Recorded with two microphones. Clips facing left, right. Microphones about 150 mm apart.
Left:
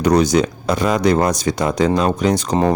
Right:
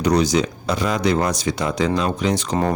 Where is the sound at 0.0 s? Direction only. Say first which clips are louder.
Left 3 dB; 50° left (ahead or behind).